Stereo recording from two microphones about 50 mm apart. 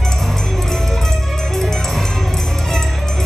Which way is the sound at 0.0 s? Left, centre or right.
Centre.